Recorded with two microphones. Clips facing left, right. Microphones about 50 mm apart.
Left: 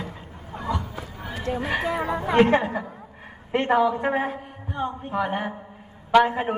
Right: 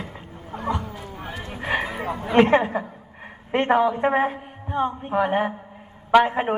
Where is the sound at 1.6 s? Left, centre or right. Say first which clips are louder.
Right 4 dB; centre.